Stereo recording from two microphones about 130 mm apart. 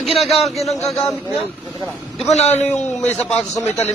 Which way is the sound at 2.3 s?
60° left (ahead or behind).